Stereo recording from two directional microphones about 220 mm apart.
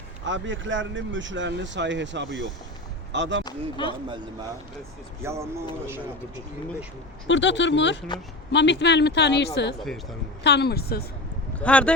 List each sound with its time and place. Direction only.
0.3 s speech: 60° right (ahead or behind)
3.4 s speech: 20° left (ahead or behind)
5.2 s speech: 10° right (ahead or behind)
7.3 s speech: 55° left (ahead or behind)
11.5 s speech: 5° left (ahead or behind)